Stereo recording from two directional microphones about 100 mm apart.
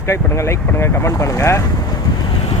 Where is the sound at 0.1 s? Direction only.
25° left (ahead or behind).